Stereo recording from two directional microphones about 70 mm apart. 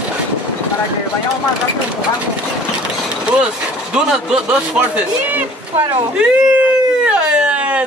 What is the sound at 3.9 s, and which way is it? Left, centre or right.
A man's voice, centre.